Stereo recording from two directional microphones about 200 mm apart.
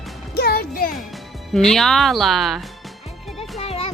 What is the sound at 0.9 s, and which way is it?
Speech, centre (ahead or behind).